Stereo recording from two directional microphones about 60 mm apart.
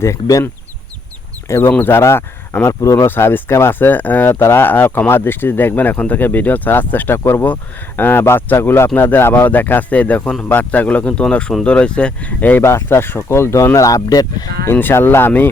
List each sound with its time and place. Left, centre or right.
1.5 s speech: left
3.1 s speech: left; by 12.3 s centre
12.4 s speech: left
12.6 s speech: left
13.7 s speech: left
14.7 s speech: left